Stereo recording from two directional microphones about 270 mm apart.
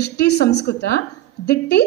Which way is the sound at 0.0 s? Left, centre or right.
Left.